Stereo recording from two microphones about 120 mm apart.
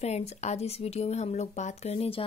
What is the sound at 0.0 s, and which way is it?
Speech, 65° left (ahead or behind).